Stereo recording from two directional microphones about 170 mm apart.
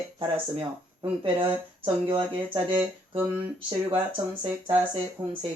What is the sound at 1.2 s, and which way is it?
Speech, 30° right (ahead or behind).